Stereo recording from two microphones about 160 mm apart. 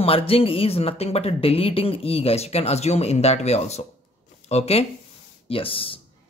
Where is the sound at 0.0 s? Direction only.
35° left (ahead or behind).